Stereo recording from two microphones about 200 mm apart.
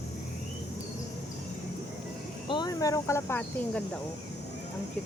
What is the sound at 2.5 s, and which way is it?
Speech, 20° left (ahead or behind).